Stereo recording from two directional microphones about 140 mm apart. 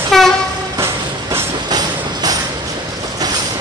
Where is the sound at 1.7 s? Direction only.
30° right (ahead or behind).